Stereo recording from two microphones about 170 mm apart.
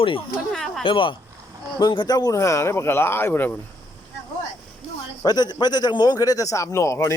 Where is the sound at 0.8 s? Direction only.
30° left (ahead or behind); by 3.6 s 10° left (ahead or behind).